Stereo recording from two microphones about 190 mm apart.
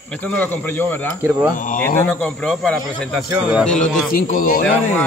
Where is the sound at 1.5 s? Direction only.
45° left (ahead or behind).